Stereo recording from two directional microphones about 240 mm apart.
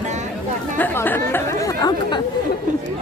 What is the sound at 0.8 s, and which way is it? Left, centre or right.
Speech, centre.